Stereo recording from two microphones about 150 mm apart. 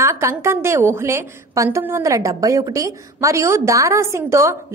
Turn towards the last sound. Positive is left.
turn(degrees=-20)  # may be behind; listen again after turning